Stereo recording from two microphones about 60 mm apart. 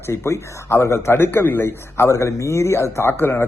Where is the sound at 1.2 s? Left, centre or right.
Left.